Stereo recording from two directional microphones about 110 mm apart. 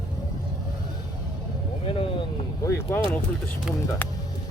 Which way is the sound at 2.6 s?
25° left (ahead or behind).